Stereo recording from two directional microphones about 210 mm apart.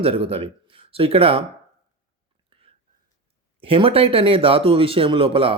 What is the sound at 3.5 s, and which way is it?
A man's voice, 25° right (ahead or behind).